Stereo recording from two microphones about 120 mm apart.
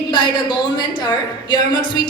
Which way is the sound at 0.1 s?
40° left (ahead or behind).